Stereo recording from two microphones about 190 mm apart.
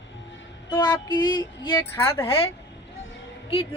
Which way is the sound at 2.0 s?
10° left (ahead or behind).